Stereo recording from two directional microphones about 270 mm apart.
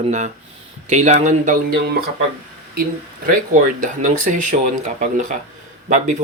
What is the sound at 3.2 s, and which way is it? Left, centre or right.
Speech, right.